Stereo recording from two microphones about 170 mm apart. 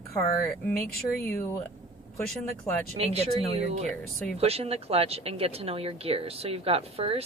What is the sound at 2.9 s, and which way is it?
A woman's voice, 40° right (ahead or behind).